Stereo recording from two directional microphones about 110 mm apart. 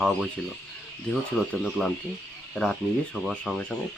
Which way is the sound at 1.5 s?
5° left (ahead or behind).